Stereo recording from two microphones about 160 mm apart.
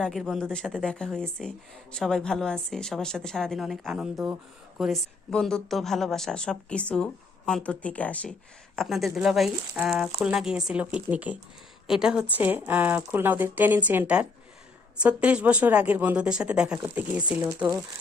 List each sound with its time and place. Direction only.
0.0 s a woman's voice: centre (ahead or behind)